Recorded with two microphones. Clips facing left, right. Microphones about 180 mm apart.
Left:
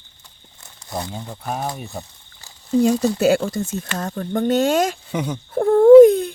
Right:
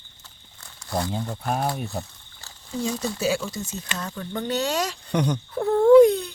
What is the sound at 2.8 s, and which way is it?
Speech, 60° left (ahead or behind).